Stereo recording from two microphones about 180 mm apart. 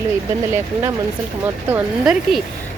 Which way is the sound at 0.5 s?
15° right (ahead or behind).